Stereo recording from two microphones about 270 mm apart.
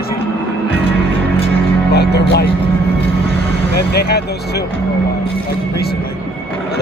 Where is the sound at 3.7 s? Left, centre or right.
Left.